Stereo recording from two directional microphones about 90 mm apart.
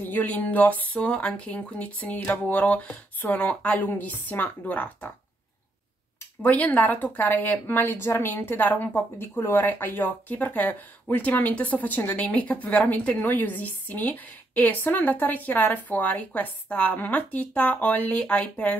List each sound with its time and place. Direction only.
0.0 s speech: 20° left (ahead or behind)
6.4 s a woman's voice: 15° left (ahead or behind)
9.3 s speech: 30° left (ahead or behind); by 18.8 s 15° left (ahead or behind)